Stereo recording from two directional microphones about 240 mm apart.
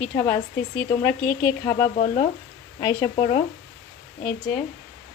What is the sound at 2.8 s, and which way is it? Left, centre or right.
Speech, centre.